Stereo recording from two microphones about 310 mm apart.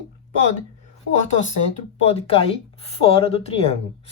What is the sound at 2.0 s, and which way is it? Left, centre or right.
Speech, centre.